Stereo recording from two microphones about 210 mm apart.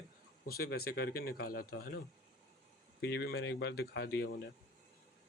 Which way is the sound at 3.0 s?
50° left (ahead or behind).